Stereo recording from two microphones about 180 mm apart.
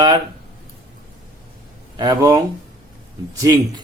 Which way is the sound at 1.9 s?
25° right (ahead or behind).